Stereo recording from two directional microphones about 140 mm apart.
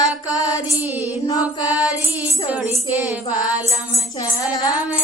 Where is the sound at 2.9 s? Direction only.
10° right (ahead or behind).